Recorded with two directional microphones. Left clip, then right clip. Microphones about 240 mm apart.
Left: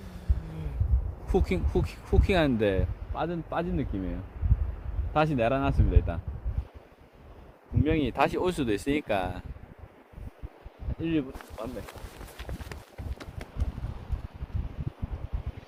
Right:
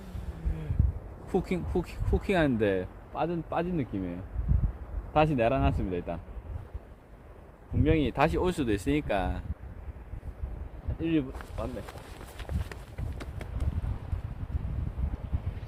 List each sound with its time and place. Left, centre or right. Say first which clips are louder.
1.3 s speech: left 2 dB; centre
5.1 s speech: even; centre
7.9 s speech: even; centre
11.0 s speech: even; centre
12.4 s run: even; centre